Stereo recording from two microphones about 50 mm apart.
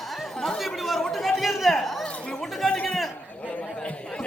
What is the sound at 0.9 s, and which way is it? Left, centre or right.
Chatter, centre.